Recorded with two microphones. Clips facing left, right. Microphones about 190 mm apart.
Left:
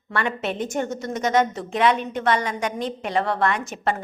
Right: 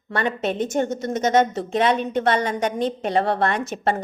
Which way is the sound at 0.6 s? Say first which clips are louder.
Right 5 dB; 25° right (ahead or behind).